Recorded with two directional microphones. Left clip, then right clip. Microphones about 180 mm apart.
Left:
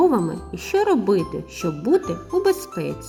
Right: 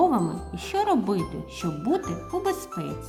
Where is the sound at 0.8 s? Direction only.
30° left (ahead or behind).